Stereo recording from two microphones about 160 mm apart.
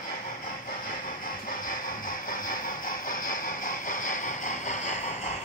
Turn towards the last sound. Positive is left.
turn(degrees=45)  # may be behind; listen again after turning